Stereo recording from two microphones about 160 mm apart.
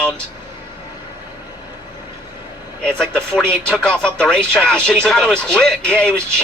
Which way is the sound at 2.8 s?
5° left (ahead or behind).